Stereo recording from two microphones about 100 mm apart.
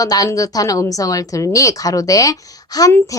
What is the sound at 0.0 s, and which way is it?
A woman's voice, 35° left (ahead or behind).